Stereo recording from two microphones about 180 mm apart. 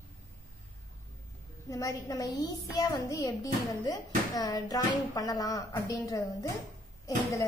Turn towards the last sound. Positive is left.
turn(degrees=20)  # may be behind; listen again after turning